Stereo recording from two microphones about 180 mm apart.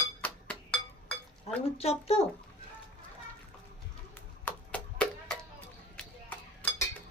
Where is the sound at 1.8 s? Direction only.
35° left (ahead or behind).